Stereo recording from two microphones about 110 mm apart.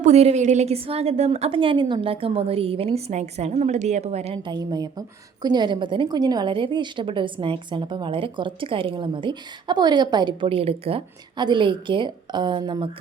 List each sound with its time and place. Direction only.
0.0 s a woman's voice: 75° right (ahead or behind)
4.4 s a woman's voice: 40° right (ahead or behind); by 11.0 s 60° right (ahead or behind)
11.3 s a woman's voice: 45° right (ahead or behind)